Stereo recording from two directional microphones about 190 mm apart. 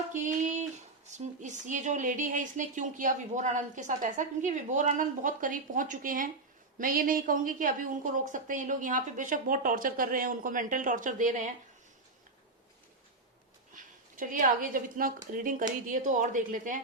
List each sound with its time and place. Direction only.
0.1 s a sound: 40° right (ahead or behind)
1.1 s a woman's voice: 40° right (ahead or behind)
14.2 s a woman's voice: 45° right (ahead or behind)